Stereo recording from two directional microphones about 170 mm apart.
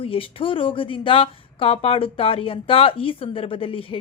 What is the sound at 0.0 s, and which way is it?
Speech, 30° left (ahead or behind).